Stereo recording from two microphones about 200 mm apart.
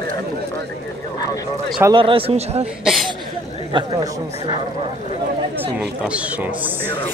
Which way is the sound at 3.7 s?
25° right (ahead or behind).